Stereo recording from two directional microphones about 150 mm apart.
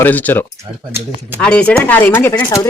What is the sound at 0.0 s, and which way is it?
Speech, 10° left (ahead or behind).